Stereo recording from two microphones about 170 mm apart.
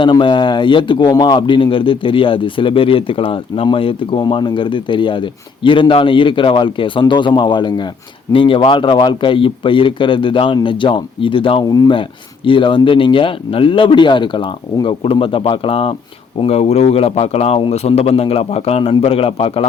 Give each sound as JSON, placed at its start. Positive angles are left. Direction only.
{"t": 0.0, "sound": "speech", "side_deg": 30}